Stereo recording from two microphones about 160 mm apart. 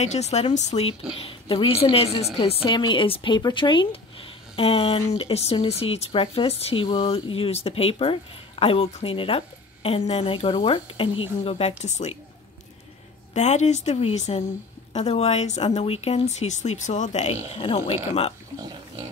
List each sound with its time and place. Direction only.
0.0 s speech: 45° left (ahead or behind)
13.3 s speech: 45° left (ahead or behind)